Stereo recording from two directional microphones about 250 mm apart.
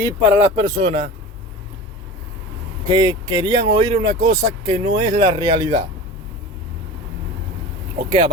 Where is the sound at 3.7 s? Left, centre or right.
Right.